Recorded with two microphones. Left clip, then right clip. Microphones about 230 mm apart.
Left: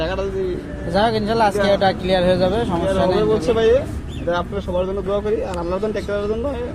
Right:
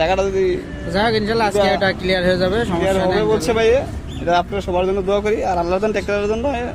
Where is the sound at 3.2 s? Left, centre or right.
Right.